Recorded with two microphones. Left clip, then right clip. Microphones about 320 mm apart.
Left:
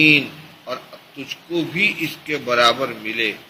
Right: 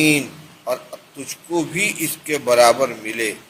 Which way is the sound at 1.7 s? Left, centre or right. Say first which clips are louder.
Left 2 dB; right.